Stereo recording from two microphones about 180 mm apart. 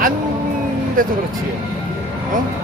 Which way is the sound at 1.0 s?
50° right (ahead or behind).